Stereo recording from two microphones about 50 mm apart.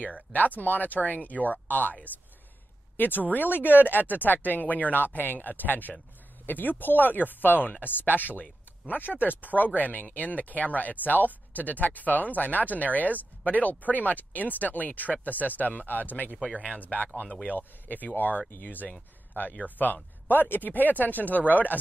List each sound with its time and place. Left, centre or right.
0.0 s speech: left
3.0 s speech: left
16.5 s speech: right
16.8 s speech: left